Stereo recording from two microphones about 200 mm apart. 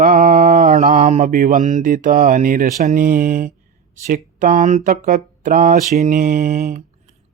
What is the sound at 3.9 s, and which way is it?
Speech, 40° right (ahead or behind).